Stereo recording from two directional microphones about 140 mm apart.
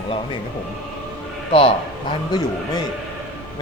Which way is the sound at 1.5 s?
40° left (ahead or behind).